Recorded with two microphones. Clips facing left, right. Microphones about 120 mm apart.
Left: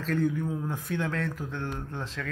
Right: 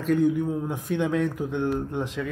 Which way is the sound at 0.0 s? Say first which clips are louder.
Right 6 dB; 15° right (ahead or behind).